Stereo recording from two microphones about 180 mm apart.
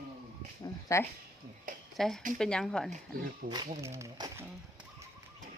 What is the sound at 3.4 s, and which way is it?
Speech, 60° right (ahead or behind).